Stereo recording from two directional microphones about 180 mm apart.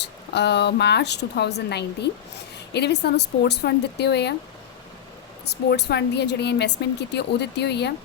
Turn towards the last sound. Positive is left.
turn(degrees=70)  # may be behind; listen again after turning